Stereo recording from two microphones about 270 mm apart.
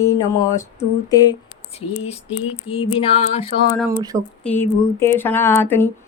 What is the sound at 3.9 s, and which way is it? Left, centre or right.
Speech, centre.